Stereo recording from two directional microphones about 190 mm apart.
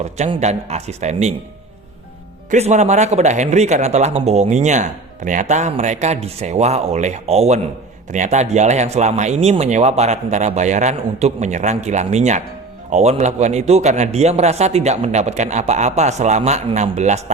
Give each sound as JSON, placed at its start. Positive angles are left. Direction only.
{"t": 0.0, "sound": "a man's voice", "side_deg": -35}
{"t": 2.5, "sound": "a man's voice", "side_deg": -35}